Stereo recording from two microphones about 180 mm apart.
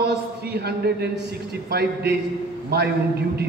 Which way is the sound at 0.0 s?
60° right (ahead or behind).